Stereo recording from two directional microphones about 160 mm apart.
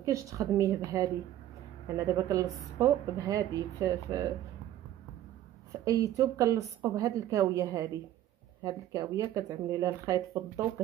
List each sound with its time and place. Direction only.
0.0 s a woman's voice: 20° right (ahead or behind)
5.9 s a woman's voice: 20° right (ahead or behind)